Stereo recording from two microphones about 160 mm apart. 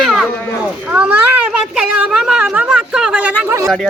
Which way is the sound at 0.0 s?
Centre (ahead or behind).